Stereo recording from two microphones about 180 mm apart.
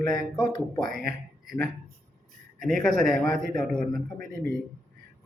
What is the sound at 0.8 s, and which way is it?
Speech, 50° right (ahead or behind).